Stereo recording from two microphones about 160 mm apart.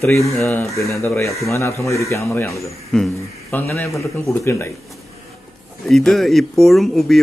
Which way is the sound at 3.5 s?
15° left (ahead or behind).